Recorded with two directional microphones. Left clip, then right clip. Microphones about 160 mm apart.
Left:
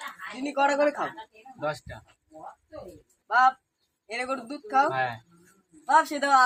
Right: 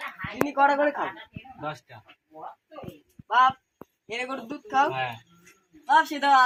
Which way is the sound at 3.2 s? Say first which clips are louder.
Right 1 dB; 30° left (ahead or behind).